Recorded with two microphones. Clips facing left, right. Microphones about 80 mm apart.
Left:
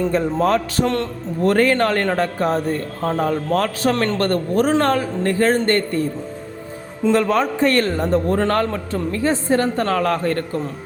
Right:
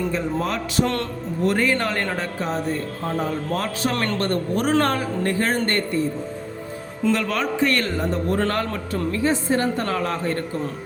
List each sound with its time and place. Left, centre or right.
0.1 s a man's voice: left
3.9 s a man's voice: left
4.2 s a man's voice: left
7.1 s a man's voice: left